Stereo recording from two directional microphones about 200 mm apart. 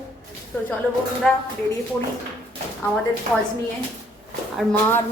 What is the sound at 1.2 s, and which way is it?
Speech, 5° left (ahead or behind).